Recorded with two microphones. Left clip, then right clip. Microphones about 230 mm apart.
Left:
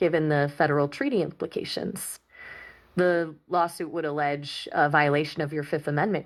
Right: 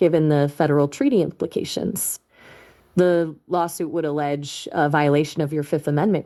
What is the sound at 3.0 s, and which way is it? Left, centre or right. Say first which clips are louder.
Speech: right 5 dB; right.